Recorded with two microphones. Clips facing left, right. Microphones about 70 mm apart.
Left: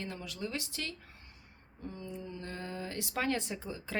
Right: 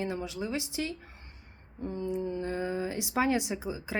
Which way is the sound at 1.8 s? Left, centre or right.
Right.